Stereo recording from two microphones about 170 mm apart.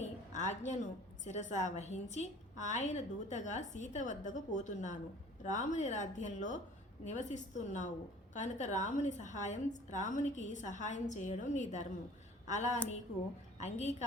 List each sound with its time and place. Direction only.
0.3 s a woman's voice: 45° left (ahead or behind)